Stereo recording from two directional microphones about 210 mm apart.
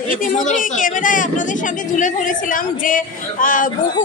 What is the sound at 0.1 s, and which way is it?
A woman's voice, 40° left (ahead or behind).